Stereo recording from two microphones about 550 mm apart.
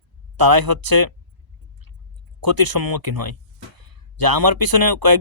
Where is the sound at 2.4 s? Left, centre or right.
Right.